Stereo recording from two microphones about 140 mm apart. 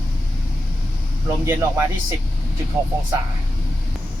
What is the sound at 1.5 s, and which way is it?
Speech, 20° right (ahead or behind).